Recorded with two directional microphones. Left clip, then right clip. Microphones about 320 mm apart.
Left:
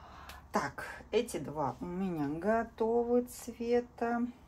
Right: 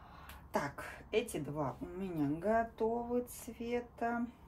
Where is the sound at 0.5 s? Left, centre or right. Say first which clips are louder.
Left 3 dB; left.